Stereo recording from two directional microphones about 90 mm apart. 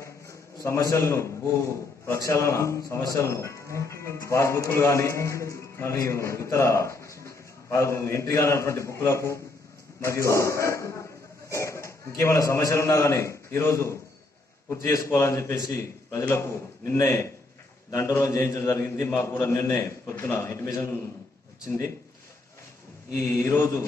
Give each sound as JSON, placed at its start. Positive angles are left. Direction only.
{"t": 0.0, "sound": "a man's voice", "side_deg": 35}
{"t": 15.0, "sound": "a man's voice", "side_deg": 30}
{"t": 21.6, "sound": "speech", "side_deg": 35}
{"t": 23.1, "sound": "speech", "side_deg": 30}